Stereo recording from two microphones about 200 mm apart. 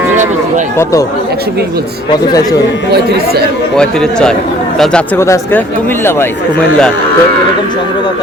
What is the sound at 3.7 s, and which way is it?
A man's voice, 5° left (ahead or behind).